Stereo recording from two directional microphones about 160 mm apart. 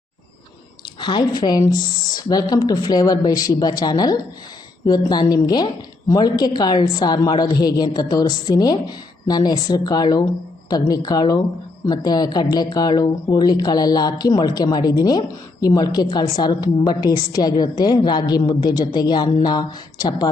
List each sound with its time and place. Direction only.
0.9 s a woman's voice: 30° left (ahead or behind)